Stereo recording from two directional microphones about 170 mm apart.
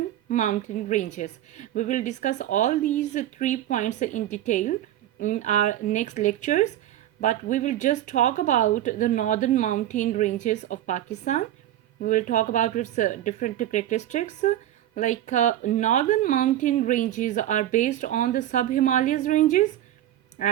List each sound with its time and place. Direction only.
0.3 s a woman's voice: 50° left (ahead or behind)